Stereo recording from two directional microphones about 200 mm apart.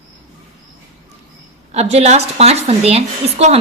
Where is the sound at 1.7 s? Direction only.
35° right (ahead or behind).